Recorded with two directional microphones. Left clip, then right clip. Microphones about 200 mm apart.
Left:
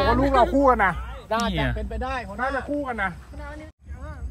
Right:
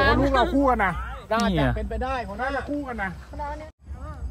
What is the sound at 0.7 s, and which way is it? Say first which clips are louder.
Speech: left 3 dB; centre (ahead or behind).